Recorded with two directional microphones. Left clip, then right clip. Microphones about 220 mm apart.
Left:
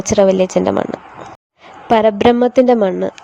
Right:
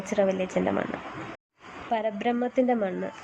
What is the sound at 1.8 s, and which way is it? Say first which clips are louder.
Speech: left 16 dB; 45° left (ahead or behind).